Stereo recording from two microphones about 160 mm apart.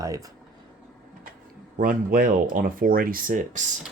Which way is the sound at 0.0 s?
20° right (ahead or behind).